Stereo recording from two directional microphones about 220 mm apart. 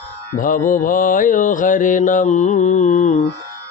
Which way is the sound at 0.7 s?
35° left (ahead or behind).